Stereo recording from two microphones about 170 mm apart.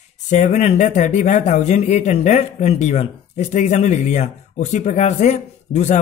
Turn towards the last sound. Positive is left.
turn(degrees=45)  # may be behind; listen again after turning